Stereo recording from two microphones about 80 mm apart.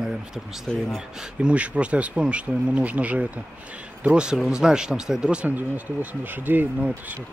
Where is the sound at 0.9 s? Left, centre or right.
Centre.